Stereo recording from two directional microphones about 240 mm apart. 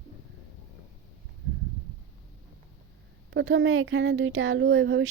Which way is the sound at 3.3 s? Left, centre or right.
Right.